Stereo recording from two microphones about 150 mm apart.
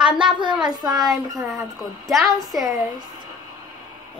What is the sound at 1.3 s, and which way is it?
A woman's voice, centre (ahead or behind).